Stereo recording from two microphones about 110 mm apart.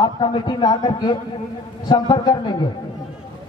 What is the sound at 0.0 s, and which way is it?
A man's voice, 45° left (ahead or behind).